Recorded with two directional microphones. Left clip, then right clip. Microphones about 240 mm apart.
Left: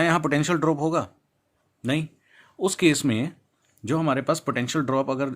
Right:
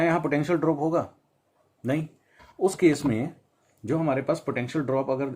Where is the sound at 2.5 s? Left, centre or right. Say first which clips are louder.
Even; left.